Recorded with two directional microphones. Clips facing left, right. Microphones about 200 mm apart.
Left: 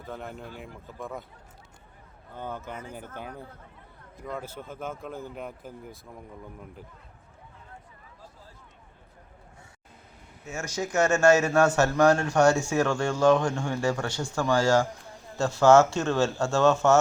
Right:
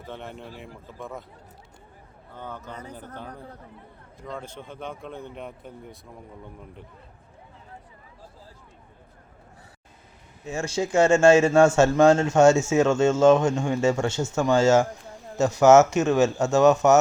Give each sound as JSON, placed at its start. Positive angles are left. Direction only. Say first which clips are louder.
{"t": 0.0, "sound": "speech", "louder": "even", "side_deg": 0}
{"t": 2.3, "sound": "a man's voice", "louder": "left 1 dB", "side_deg": 10}
{"t": 10.5, "sound": "speech", "louder": "right 5 dB", "side_deg": -30}